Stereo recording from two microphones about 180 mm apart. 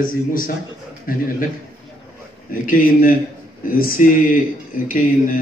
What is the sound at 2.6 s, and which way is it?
A man's voice, 50° left (ahead or behind).